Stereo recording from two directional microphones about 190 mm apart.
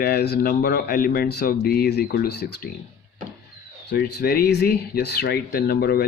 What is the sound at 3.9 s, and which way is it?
Speech, 60° left (ahead or behind).